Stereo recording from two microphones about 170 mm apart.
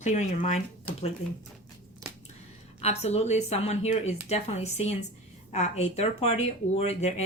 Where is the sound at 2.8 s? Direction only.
40° left (ahead or behind).